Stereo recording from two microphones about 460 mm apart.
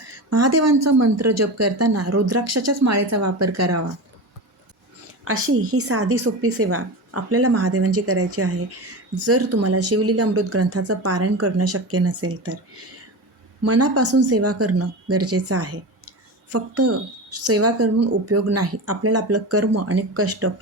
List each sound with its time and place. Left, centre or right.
0.3 s speech: right
5.2 s a woman's voice: right